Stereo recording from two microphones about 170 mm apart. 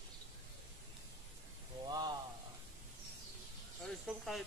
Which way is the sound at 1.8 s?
25° right (ahead or behind).